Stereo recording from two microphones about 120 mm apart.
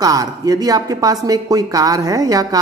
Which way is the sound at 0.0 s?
30° right (ahead or behind).